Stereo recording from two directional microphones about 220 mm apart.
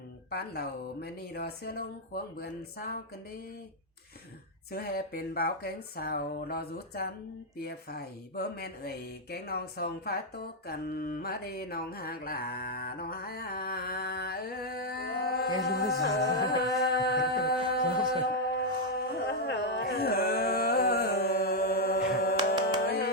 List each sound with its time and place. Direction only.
0.3 s speech: 45° left (ahead or behind)
4.7 s speech: 45° left (ahead or behind)
18.3 s a sound: 45° left (ahead or behind)
22.6 s music: 45° left (ahead or behind)